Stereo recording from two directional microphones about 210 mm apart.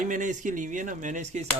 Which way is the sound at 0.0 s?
40° right (ahead or behind).